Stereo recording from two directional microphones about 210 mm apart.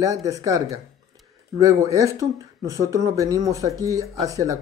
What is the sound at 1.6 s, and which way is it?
Speech, 15° right (ahead or behind).